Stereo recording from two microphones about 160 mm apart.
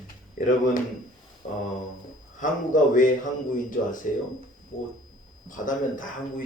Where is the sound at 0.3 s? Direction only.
55° left (ahead or behind).